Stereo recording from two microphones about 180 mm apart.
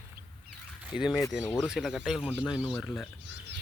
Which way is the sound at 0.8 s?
5° right (ahead or behind).